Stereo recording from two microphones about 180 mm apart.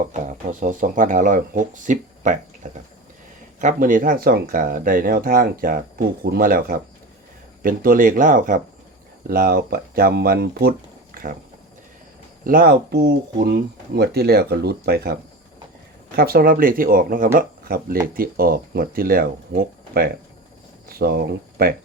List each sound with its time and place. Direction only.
0.0 s speech: 45° right (ahead or behind)
12.5 s speech: 55° right (ahead or behind)